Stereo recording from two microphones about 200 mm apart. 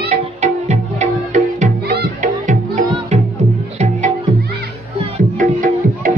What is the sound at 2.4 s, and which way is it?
Music, 40° right (ahead or behind).